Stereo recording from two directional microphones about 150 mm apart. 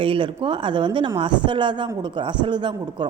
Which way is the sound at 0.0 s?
35° right (ahead or behind).